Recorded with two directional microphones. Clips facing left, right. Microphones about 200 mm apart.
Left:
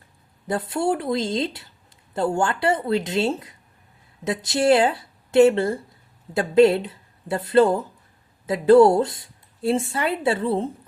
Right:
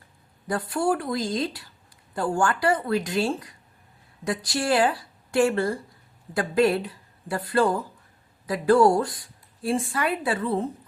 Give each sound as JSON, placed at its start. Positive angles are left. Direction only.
{"t": 0.4, "sound": "speech", "side_deg": 25}